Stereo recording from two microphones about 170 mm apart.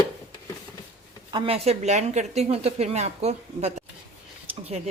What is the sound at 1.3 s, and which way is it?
A woman's voice, 30° right (ahead or behind).